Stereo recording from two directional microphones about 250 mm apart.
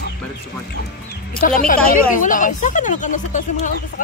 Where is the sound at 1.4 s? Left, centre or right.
Left.